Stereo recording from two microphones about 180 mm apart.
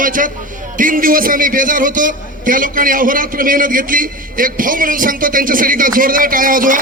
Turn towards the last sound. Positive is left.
turn(degrees=-50)  # may be behind; listen again after turning